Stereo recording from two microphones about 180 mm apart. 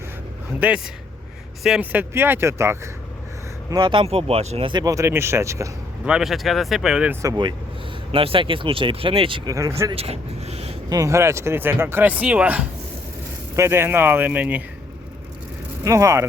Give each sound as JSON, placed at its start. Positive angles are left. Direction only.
{"t": 0.6, "sound": "speech", "side_deg": -10}
{"t": 3.7, "sound": "speech", "side_deg": -25}
{"t": 6.1, "sound": "speech", "side_deg": 0}
{"t": 9.6, "sound": "speech", "side_deg": -15}
{"t": 9.9, "sound": "speech", "side_deg": -35}
{"t": 10.8, "sound": "speech", "side_deg": -20}
{"t": 15.8, "sound": "speech", "side_deg": -15}